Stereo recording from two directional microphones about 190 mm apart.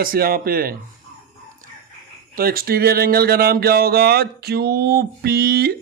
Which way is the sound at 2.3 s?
50° right (ahead or behind).